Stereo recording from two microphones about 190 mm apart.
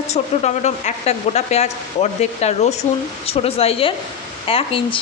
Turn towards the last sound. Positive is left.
turn(degrees=30)  # may be behind; listen again after turning